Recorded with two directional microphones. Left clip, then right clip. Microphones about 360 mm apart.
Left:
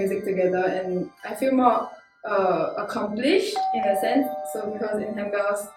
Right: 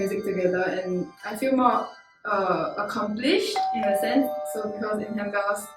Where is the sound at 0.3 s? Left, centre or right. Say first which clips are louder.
Left 2 dB; centre.